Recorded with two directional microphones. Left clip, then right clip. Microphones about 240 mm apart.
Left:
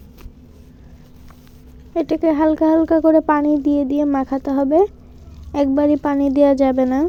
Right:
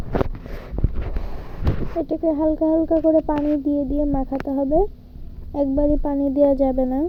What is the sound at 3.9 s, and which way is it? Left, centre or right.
Speech, left.